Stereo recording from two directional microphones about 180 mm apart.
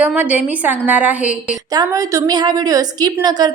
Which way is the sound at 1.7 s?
20° right (ahead or behind).